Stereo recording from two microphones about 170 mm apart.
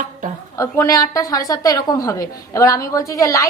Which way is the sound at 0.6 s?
20° left (ahead or behind).